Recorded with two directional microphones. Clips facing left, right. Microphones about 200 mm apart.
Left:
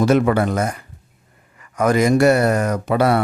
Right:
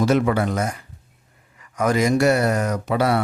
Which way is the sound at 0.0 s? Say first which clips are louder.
Left 3 dB; 55° left (ahead or behind).